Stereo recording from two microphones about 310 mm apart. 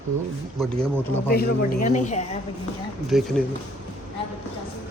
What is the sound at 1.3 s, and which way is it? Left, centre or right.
Speech, left.